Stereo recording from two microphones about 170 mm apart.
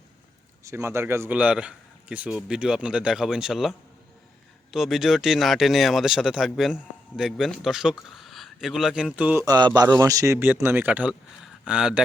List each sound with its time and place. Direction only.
0.6 s speech: 15° right (ahead or behind)
9.5 s a man's voice: 25° right (ahead or behind); by 12.0 s 5° right (ahead or behind)